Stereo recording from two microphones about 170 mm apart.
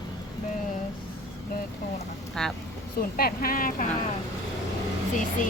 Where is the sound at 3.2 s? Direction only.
60° left (ahead or behind).